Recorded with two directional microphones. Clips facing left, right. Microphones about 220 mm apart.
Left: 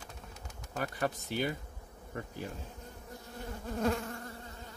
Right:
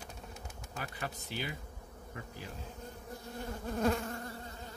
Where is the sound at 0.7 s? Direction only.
50° left (ahead or behind).